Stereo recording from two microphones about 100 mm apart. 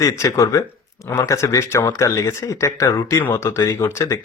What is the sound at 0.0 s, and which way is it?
Speech, 35° left (ahead or behind).